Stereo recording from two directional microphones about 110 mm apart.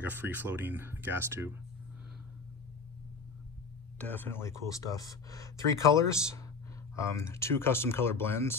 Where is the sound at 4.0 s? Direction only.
15° left (ahead or behind).